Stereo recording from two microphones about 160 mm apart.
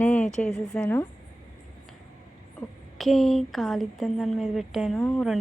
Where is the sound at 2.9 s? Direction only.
Centre (ahead or behind).